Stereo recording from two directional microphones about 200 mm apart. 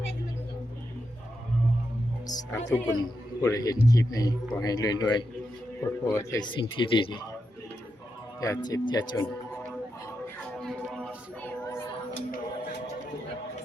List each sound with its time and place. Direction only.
2.2 s a man's voice: 20° left (ahead or behind)
8.4 s a man's voice: 15° left (ahead or behind)
10.6 s a sound: centre (ahead or behind)
11.6 s music: 15° left (ahead or behind)